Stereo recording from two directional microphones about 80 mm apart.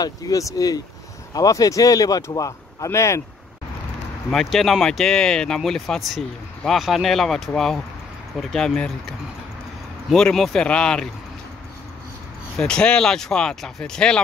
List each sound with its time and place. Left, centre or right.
0.0 s speech: left
4.3 s speech: centre
10.0 s speech: centre
12.5 s speech: centre